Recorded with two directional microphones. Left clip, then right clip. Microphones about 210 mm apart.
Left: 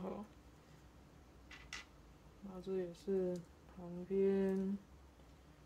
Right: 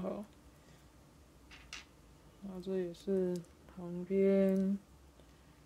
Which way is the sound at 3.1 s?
55° right (ahead or behind).